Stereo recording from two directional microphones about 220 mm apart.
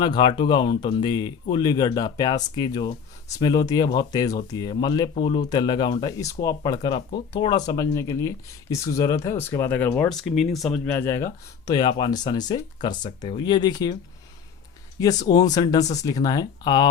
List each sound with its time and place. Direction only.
0.0 s speech: 20° left (ahead or behind)
12.9 s speech: 30° left (ahead or behind)
14.9 s speech: 15° left (ahead or behind)